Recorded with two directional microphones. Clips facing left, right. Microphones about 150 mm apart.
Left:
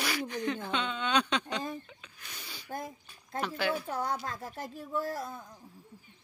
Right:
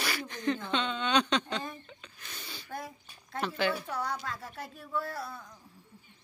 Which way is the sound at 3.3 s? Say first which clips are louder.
Right 1 dB; 10° left (ahead or behind).